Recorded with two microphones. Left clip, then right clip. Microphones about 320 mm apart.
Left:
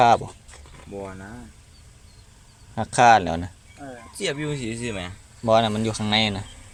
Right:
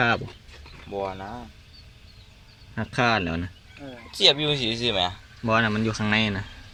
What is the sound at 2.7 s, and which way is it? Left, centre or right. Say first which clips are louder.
Speech: left 8 dB; centre.